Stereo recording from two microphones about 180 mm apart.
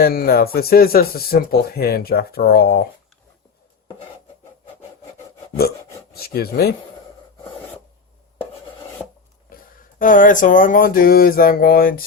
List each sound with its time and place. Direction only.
0.0 s speech: 55° left (ahead or behind)
6.1 s speech: 60° left (ahead or behind)
10.0 s speech: 45° left (ahead or behind)